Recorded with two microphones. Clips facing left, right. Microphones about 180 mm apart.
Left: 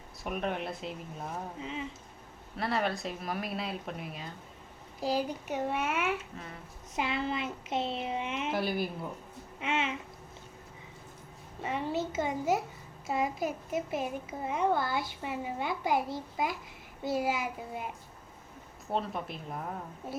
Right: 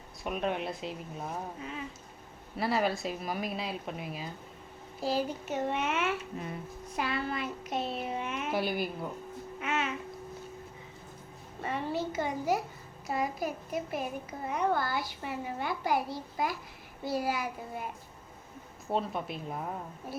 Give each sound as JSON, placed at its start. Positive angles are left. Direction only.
{"t": 0.3, "sound": "speech", "side_deg": 0}
{"t": 2.6, "sound": "speech", "side_deg": -5}
{"t": 4.9, "sound": "speech", "side_deg": 15}
{"t": 6.9, "sound": "a child's voice", "side_deg": 20}
{"t": 8.5, "sound": "speech", "side_deg": 0}
{"t": 9.6, "sound": "babbling", "side_deg": 25}
{"t": 11.6, "sound": "a child's voice", "side_deg": 15}
{"t": 18.9, "sound": "speech", "side_deg": 0}